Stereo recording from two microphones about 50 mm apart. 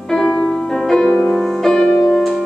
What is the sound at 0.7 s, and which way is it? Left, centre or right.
Music, centre.